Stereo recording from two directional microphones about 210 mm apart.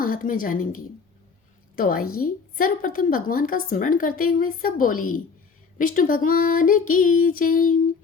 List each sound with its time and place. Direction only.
0.0 s a woman's voice: 40° left (ahead or behind)